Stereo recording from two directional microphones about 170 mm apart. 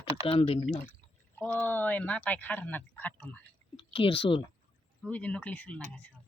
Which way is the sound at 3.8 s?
35° left (ahead or behind).